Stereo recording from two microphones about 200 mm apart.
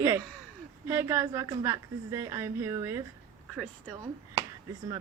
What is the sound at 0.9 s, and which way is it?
A woman's voice, 10° right (ahead or behind).